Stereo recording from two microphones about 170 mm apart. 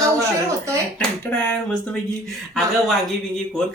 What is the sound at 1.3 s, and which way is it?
Music, 10° left (ahead or behind).